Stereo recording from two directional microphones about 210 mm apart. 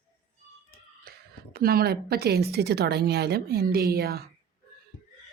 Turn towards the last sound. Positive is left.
turn(degrees=-45)  # may be behind; listen again after turning